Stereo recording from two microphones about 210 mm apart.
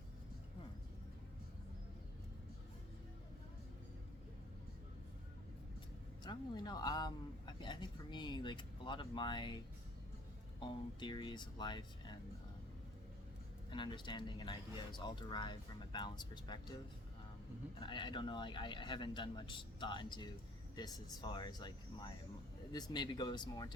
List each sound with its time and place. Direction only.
6.2 s speech: 20° left (ahead or behind)
10.6 s speech: 20° left (ahead or behind)
13.7 s speech: 20° left (ahead or behind)
17.7 s speech: 20° left (ahead or behind)